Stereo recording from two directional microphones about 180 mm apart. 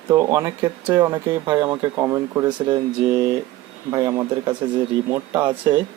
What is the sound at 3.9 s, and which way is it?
Speech, 20° right (ahead or behind).